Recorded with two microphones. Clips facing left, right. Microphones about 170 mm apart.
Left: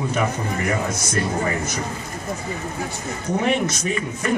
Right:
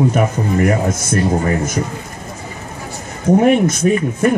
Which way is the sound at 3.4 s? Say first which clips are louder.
Right 6 dB; 50° right (ahead or behind).